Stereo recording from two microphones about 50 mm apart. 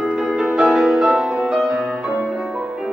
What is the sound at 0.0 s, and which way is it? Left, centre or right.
Music, centre.